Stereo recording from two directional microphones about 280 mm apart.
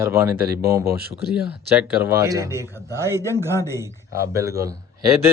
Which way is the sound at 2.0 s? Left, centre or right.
Centre.